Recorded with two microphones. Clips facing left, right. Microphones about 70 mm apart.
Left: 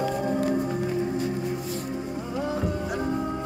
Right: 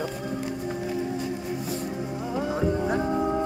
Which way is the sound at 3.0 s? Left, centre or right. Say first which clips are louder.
Right 3 dB; centre.